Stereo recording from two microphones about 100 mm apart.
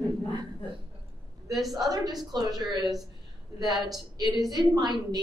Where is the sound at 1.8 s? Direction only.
40° right (ahead or behind).